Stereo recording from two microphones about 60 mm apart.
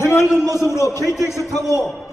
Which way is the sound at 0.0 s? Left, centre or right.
Left.